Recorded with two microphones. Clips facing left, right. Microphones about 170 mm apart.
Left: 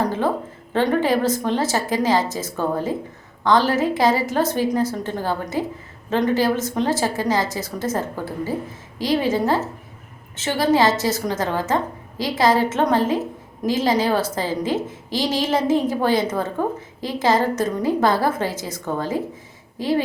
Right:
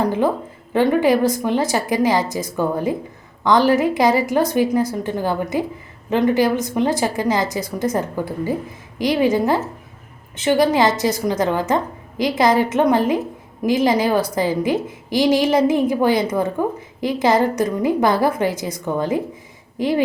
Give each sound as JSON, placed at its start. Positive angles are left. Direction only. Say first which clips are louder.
{"t": 0.7, "sound": "a woman's voice", "louder": "right 3 dB", "side_deg": -15}